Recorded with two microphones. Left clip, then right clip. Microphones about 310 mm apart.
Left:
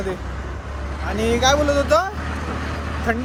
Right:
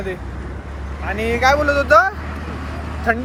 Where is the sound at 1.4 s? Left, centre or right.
Centre.